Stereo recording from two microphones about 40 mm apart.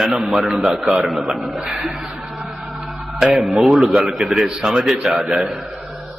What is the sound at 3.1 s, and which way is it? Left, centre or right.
A man's voice, centre.